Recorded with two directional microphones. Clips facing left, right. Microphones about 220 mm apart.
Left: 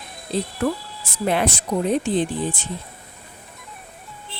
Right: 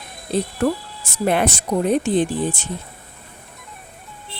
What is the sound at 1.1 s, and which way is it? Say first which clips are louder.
Speech: right 2 dB; 55° right (ahead or behind).